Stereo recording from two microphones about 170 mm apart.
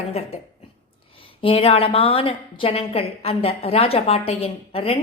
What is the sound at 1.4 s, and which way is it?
A woman's voice, 35° left (ahead or behind).